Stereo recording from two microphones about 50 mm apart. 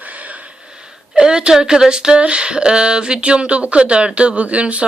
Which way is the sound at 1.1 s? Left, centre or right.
Centre.